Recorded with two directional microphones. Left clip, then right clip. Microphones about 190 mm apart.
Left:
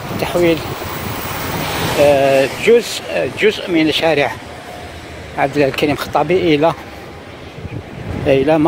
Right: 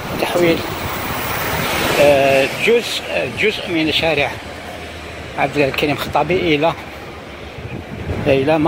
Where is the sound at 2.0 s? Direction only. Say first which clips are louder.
Left 2 dB; 25° left (ahead or behind); by 4.3 s 40° left (ahead or behind).